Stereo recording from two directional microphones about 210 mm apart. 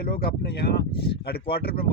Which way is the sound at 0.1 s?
45° left (ahead or behind).